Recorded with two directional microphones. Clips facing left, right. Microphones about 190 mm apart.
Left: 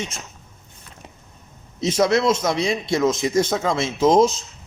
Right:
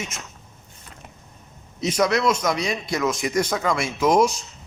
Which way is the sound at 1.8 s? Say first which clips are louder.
Left 2 dB; 25° left (ahead or behind).